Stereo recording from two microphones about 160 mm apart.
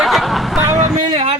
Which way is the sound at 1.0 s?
25° right (ahead or behind).